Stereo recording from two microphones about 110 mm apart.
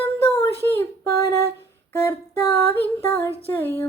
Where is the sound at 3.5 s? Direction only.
20° left (ahead or behind).